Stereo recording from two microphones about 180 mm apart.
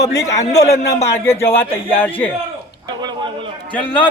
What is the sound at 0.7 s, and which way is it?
Speech, 35° left (ahead or behind).